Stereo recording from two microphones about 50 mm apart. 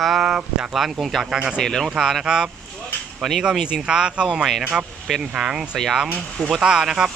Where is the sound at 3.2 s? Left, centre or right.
Centre.